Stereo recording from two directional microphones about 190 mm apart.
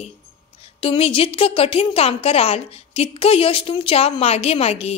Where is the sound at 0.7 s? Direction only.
30° left (ahead or behind).